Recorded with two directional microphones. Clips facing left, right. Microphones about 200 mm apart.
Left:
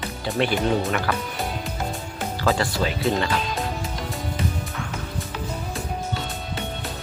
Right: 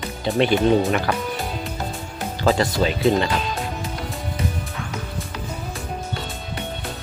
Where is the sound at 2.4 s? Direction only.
20° right (ahead or behind).